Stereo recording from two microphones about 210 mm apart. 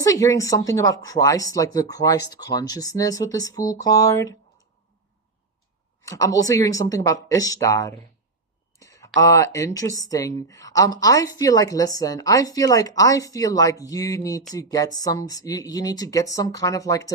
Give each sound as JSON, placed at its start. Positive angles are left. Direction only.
{"t": 0.0, "sound": "a woman's voice", "side_deg": 15}
{"t": 6.0, "sound": "a woman's voice", "side_deg": 15}